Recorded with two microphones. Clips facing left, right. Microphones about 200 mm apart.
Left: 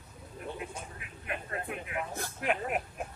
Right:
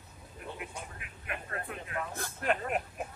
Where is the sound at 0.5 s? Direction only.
25° left (ahead or behind); by 2.8 s 10° left (ahead or behind).